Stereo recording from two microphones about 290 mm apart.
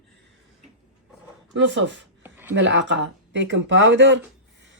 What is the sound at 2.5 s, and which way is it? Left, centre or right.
Speech, right.